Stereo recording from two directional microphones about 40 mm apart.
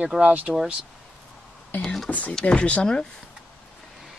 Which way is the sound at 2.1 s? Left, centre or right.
Left.